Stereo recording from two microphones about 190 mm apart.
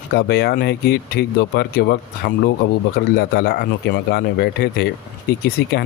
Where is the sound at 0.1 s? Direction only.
55° left (ahead or behind).